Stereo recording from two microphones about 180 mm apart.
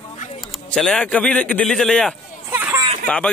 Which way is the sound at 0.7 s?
5° left (ahead or behind).